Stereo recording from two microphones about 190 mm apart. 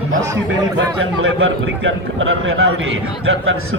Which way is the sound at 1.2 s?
85° right.